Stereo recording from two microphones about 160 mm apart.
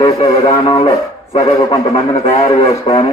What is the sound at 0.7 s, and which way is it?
A man's voice, 35° left (ahead or behind).